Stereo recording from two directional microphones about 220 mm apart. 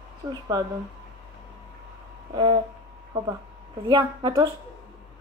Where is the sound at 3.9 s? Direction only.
20° right (ahead or behind).